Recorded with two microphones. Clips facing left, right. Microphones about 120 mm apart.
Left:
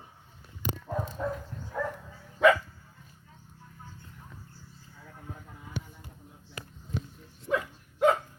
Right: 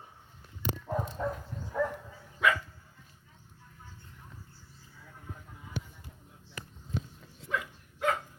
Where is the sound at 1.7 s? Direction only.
Centre (ahead or behind).